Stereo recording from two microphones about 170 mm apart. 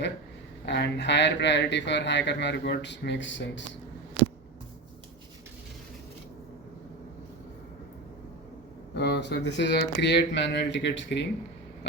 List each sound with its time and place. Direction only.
0.6 s speech: 90° left
9.0 s speech: 90° left